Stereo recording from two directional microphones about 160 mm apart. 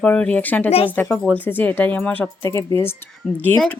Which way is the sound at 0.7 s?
35° left (ahead or behind).